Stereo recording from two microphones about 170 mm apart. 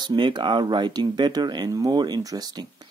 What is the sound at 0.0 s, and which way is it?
Speech, 25° right (ahead or behind).